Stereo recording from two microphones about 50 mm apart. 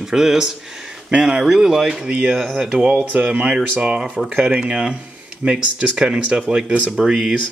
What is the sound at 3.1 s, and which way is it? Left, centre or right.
Speech, right.